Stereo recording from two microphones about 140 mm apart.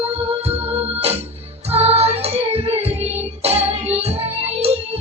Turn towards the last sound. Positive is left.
turn(degrees=-45)  # may be behind; listen again after turning